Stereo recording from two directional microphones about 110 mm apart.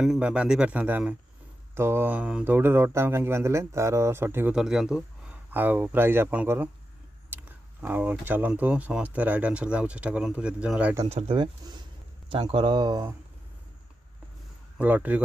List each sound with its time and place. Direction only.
0.0 s speech: 5° right (ahead or behind)
4.6 s a man's voice: 5° right (ahead or behind)
5.5 s speech: 15° right (ahead or behind)
11.1 s speech: 70° right (ahead or behind)
11.3 s speech: 45° right (ahead or behind)
14.8 s speech: 15° right (ahead or behind)